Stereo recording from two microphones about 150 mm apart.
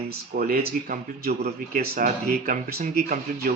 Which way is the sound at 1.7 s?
70° right (ahead or behind).